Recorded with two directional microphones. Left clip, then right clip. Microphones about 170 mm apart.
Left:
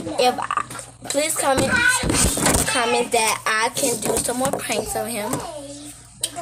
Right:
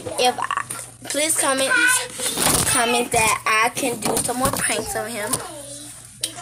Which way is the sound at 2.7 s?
25° right (ahead or behind).